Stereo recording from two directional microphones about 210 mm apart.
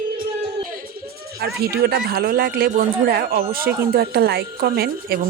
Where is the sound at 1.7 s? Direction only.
50° right (ahead or behind).